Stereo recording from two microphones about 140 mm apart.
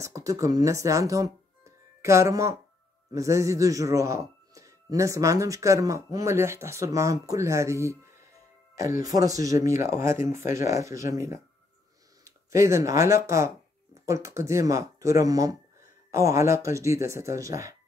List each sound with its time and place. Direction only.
0.0 s speech: 25° right (ahead or behind)